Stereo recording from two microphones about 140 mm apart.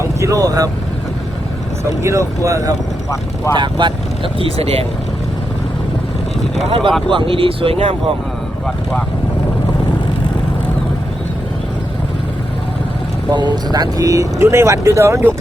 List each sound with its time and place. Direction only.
0.0 s speech: 20° right (ahead or behind)
2.0 s speech: 20° right (ahead or behind)
3.5 s speech: 35° right (ahead or behind)
6.7 s speech: 40° right (ahead or behind)
8.6 s speech: 5° left (ahead or behind)
13.3 s speech: 30° right (ahead or behind)